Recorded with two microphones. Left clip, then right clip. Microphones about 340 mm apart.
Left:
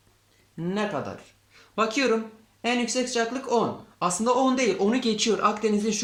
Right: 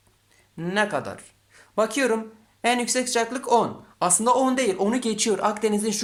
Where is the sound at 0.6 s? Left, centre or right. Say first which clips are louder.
Right 4 dB; right.